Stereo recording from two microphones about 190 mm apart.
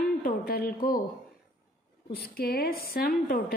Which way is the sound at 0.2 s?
50° left (ahead or behind).